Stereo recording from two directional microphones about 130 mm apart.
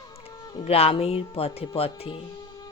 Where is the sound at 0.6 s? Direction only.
50° left (ahead or behind).